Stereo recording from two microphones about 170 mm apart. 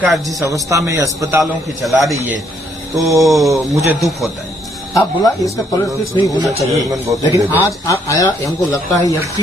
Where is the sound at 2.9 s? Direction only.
20° right (ahead or behind).